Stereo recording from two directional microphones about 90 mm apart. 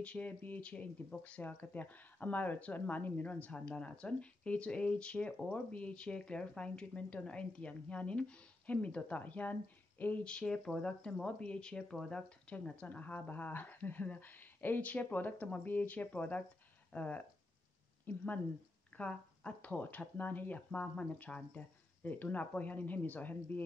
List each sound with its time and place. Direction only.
0.0 s speech: 15° left (ahead or behind)